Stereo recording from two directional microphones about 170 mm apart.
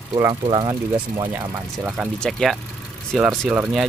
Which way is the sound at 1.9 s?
Centre (ahead or behind).